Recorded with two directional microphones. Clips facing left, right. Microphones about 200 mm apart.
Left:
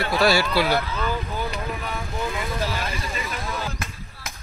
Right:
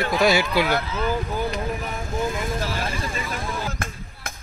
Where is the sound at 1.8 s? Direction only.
45° right (ahead or behind).